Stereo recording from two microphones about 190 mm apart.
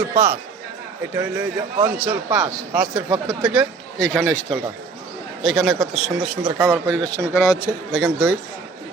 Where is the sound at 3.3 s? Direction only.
Centre (ahead or behind).